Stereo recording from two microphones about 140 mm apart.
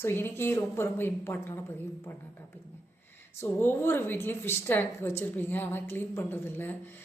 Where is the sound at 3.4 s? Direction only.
15° left (ahead or behind).